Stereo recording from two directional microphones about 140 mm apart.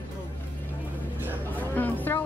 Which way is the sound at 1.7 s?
15° left (ahead or behind).